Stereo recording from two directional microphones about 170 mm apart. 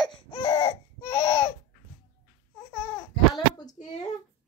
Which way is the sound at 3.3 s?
25° left (ahead or behind).